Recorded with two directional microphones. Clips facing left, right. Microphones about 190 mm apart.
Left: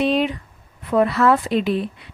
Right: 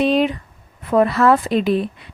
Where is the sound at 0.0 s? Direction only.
40° right (ahead or behind).